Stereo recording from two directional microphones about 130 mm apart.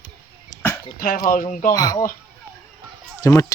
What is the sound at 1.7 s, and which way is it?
Speech, 30° left (ahead or behind).